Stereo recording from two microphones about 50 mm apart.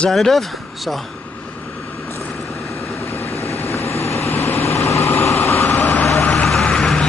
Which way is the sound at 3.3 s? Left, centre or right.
Left.